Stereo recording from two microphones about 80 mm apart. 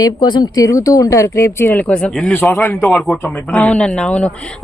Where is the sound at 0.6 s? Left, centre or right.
Left.